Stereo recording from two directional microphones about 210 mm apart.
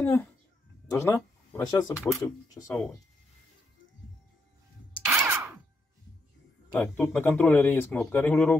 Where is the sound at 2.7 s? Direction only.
5° left (ahead or behind).